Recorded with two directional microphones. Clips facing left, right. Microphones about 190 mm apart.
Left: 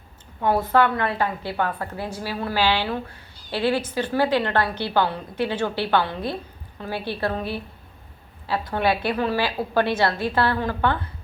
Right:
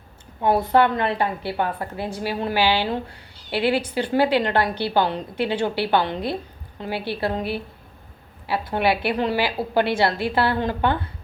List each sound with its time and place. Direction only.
0.4 s a woman's voice: 15° right (ahead or behind)